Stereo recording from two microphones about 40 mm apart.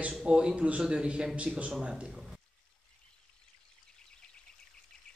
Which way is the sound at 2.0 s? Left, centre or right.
Centre.